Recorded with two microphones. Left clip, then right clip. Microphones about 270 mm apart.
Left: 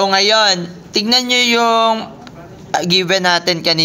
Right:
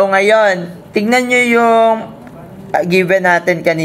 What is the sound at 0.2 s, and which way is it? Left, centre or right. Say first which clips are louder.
Speech: right 2 dB; left.